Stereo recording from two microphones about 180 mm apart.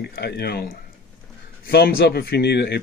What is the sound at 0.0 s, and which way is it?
Speech, 65° left (ahead or behind).